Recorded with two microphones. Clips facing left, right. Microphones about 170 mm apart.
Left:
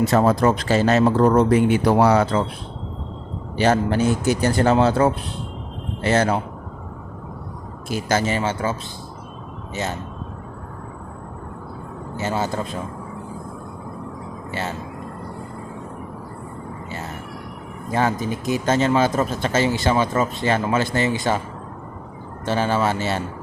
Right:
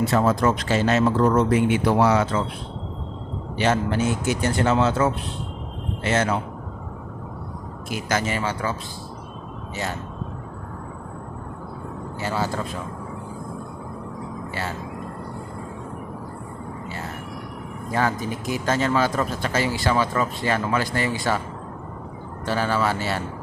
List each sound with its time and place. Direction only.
0.0 s speech: 40° left (ahead or behind)
3.6 s speech: 35° left (ahead or behind)
7.9 s speech: 30° left (ahead or behind)
12.1 s speech: 20° left (ahead or behind)
17.9 s speech: 20° left (ahead or behind)
22.4 s speech: 25° left (ahead or behind)